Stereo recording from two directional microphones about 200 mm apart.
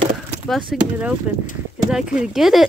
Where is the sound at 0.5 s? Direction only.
Centre (ahead or behind).